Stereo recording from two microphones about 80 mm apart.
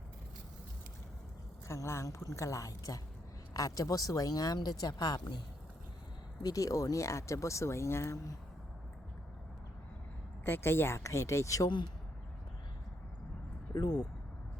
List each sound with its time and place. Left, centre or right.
1.6 s speech: left
6.4 s speech: left
10.4 s speech: left
13.7 s speech: left